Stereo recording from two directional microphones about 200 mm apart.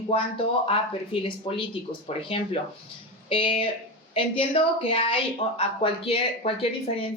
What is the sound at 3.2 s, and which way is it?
Speech, 25° left (ahead or behind).